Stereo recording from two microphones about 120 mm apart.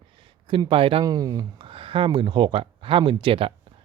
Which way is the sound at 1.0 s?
30° right (ahead or behind).